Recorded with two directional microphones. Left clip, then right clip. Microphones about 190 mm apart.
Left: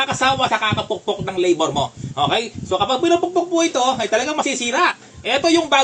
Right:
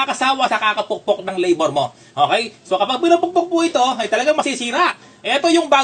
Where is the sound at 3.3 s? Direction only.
15° right (ahead or behind).